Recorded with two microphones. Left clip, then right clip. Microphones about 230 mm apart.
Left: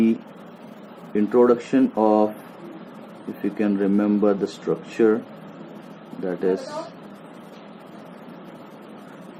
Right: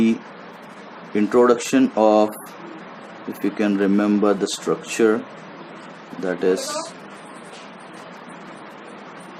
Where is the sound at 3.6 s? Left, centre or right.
Right.